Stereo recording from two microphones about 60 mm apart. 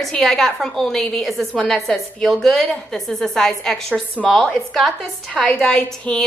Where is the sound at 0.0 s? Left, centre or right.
Centre.